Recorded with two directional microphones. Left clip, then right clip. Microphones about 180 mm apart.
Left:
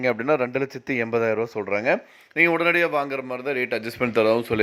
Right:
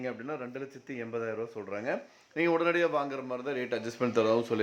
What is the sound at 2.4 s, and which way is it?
A man's voice, 25° left (ahead or behind).